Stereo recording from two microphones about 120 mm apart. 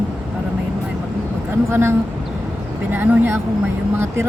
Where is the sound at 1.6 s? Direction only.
20° right (ahead or behind).